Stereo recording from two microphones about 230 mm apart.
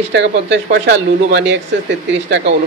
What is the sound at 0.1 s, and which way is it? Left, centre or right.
Speech, right.